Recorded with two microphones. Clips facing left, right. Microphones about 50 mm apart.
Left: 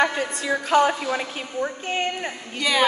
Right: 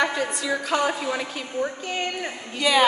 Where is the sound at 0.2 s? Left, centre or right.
Left.